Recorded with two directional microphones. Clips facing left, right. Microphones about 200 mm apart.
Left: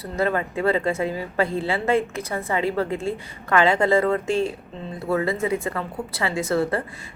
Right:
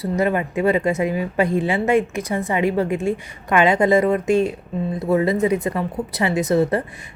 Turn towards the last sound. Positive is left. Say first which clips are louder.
# right 4 dB
turn(degrees=-20)  # may be behind; listen again after turning